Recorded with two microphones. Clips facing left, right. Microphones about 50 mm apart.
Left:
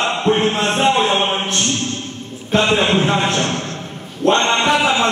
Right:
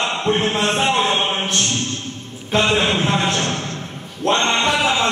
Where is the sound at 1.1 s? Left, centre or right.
Centre.